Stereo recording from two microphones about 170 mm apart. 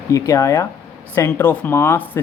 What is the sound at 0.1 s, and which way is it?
A man's voice, 20° left (ahead or behind).